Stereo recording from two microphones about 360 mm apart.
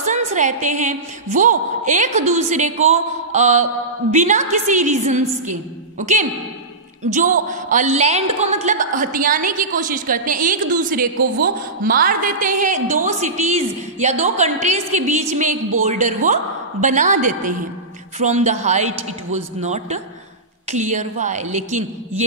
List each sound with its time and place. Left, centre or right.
0.0 s a woman's voice: centre
7.4 s a woman's voice: right